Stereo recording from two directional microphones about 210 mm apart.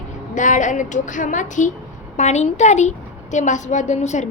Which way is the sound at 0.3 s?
35° left (ahead or behind).